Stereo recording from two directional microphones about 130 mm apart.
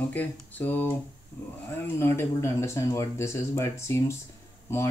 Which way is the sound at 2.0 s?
20° left (ahead or behind).